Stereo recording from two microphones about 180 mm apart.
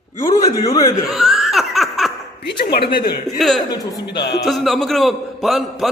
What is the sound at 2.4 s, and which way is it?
Speech, 65° left (ahead or behind).